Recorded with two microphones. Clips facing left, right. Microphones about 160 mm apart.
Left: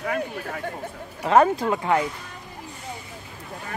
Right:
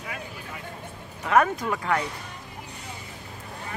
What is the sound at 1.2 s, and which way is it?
Speech, 30° left (ahead or behind).